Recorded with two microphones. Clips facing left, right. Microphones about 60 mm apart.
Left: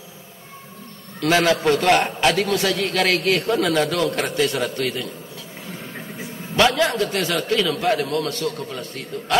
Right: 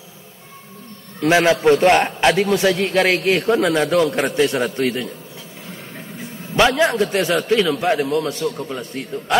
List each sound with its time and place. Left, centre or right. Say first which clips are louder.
1.2 s a man's voice: right 3 dB; right
6.5 s a man's voice: right 2 dB; right